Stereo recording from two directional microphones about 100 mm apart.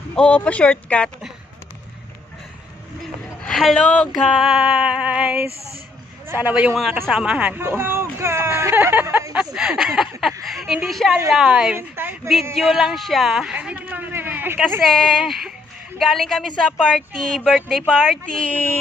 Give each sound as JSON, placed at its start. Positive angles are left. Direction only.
{"t": 0.1, "sound": "speech", "side_deg": 10}
{"t": 3.4, "sound": "speech", "side_deg": 5}
{"t": 6.2, "sound": "a man's voice", "side_deg": -20}
{"t": 6.5, "sound": "speech", "side_deg": -5}
{"t": 9.3, "sound": "speech", "side_deg": -5}
{"t": 11.7, "sound": "a woman's voice", "side_deg": -20}
{"t": 12.5, "sound": "speech", "side_deg": -5}
{"t": 14.8, "sound": "speech", "side_deg": 5}
{"t": 18.4, "sound": "speech", "side_deg": 15}